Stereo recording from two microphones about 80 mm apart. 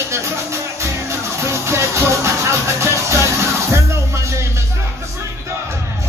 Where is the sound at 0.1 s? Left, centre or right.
Right.